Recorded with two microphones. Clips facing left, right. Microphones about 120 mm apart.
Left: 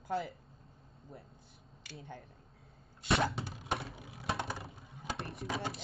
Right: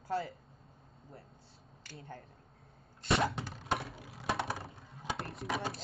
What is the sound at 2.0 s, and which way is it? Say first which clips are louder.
Speech: even; centre (ahead or behind).